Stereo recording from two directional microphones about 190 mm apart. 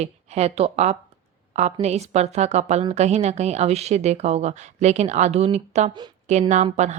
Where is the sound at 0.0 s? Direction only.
35° right (ahead or behind).